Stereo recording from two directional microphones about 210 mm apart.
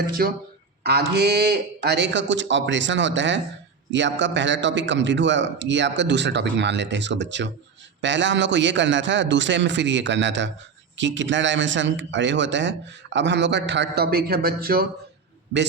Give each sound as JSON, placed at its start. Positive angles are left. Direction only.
{"t": 0.2, "sound": "a man's voice", "side_deg": -45}